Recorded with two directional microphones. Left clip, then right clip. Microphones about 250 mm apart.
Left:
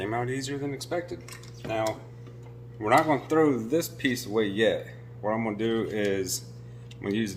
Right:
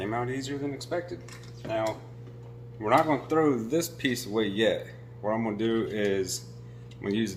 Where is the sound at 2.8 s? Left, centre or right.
Centre.